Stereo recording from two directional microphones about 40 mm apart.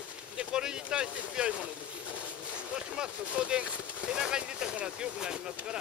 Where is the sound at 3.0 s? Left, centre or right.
Right.